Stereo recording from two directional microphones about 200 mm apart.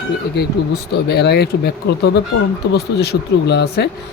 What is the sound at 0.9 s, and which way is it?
Speech, 55° left (ahead or behind).